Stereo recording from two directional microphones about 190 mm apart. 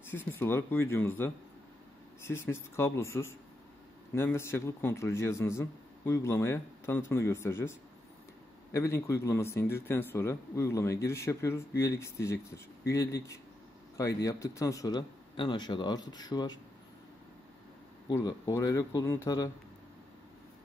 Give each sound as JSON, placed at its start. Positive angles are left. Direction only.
{"t": 0.1, "sound": "speech", "side_deg": 10}
{"t": 8.7, "sound": "a man's voice", "side_deg": 15}
{"t": 18.0, "sound": "speech", "side_deg": 20}